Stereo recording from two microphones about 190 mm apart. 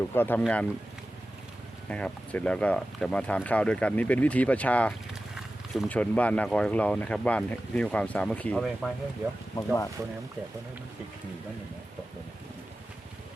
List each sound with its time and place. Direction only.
0.1 s speech: 10° left (ahead or behind)
1.9 s speech: 5° left (ahead or behind)